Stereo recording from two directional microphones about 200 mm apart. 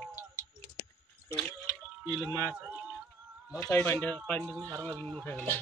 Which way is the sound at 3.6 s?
10° left (ahead or behind).